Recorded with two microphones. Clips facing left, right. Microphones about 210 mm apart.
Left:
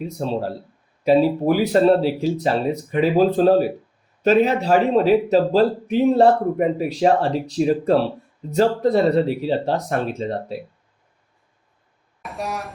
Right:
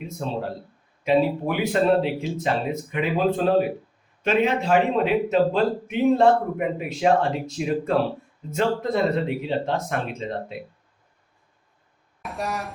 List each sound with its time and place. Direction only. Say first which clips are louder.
0.0 s a man's voice: left 5 dB; 35° left (ahead or behind)
12.2 s speech: left 1 dB; centre (ahead or behind)